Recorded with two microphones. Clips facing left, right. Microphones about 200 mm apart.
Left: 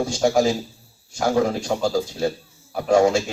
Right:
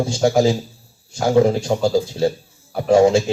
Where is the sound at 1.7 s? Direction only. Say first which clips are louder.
Right 4 dB; 25° right (ahead or behind).